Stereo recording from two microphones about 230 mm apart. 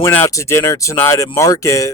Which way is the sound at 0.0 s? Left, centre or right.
Centre.